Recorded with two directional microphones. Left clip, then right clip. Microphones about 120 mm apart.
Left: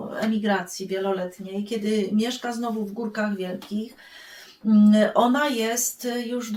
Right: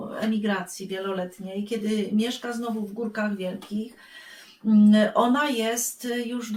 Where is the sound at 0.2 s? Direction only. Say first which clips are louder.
Left 3 dB; 15° left (ahead or behind).